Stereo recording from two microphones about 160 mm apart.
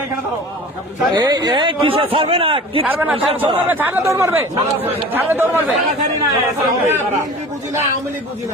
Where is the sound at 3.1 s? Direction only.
35° right (ahead or behind).